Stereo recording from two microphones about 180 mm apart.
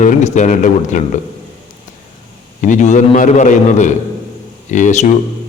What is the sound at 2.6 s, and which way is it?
A man's voice, 45° left (ahead or behind).